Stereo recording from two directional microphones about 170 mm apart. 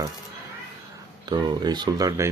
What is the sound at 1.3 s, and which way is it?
Speech, 25° right (ahead or behind).